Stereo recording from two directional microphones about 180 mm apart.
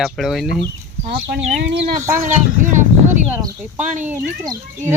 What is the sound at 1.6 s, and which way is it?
Speech, 85° right.